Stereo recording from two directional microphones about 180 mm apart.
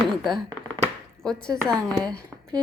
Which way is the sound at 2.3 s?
5° right (ahead or behind).